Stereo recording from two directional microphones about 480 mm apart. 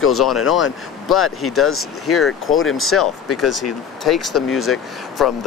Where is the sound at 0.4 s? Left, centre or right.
Left.